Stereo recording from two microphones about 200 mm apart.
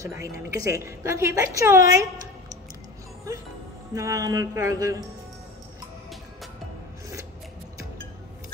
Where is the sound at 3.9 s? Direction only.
15° right (ahead or behind).